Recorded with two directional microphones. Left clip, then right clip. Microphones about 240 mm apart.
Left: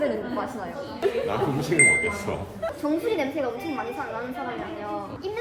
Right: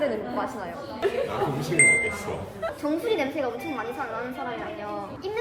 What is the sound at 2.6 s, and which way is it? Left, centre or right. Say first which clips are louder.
A woman's voice: left 1 dB; centre.